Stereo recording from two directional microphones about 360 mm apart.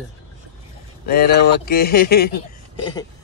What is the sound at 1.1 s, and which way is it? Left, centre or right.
Speech, left.